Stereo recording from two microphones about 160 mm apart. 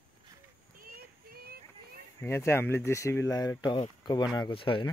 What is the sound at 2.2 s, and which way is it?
Speech, 15° left (ahead or behind).